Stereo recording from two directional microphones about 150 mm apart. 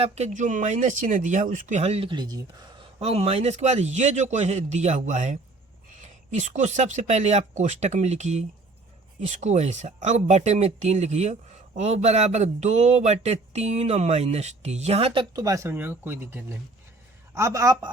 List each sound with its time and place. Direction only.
0.0 s speech: 50° right (ahead or behind); by 2.6 s 25° right (ahead or behind)
3.0 s a man's voice: 45° right (ahead or behind); by 17.7 s 20° right (ahead or behind)